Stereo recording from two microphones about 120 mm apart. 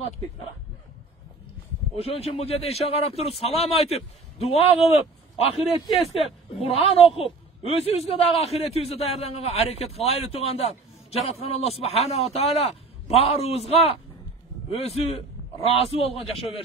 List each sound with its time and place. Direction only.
2.0 s a man's voice: 55° left (ahead or behind)